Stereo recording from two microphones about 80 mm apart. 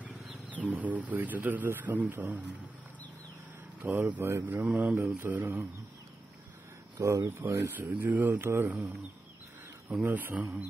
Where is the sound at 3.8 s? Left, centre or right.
Right.